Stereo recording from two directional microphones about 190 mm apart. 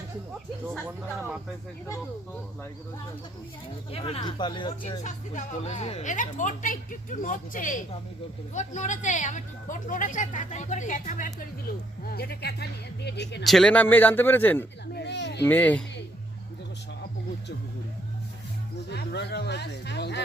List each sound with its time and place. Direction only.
3.9 s speech: 30° left (ahead or behind)
4.9 s speech: 40° left (ahead or behind)
12.0 s speech: 55° left (ahead or behind)
13.4 s a man's voice: centre (ahead or behind)
14.9 s speech: 65° left (ahead or behind)
15.4 s a man's voice: 10° left (ahead or behind)
18.9 s speech: 60° left (ahead or behind)